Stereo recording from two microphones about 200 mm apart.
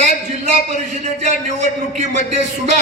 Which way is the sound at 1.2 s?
35° right (ahead or behind).